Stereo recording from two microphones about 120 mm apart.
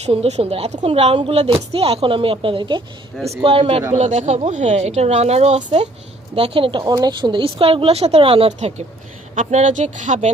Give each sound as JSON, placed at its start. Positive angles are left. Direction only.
{"t": 0.0, "sound": "speech", "side_deg": -60}
{"t": 3.4, "sound": "speech", "side_deg": -55}
{"t": 3.9, "sound": "speech", "side_deg": -70}
{"t": 6.3, "sound": "speech", "side_deg": -50}
{"t": 9.3, "sound": "speech", "side_deg": -85}